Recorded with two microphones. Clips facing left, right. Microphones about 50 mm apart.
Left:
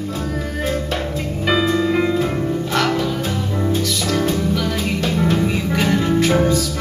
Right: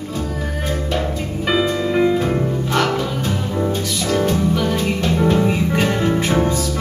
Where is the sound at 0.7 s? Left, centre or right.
Centre.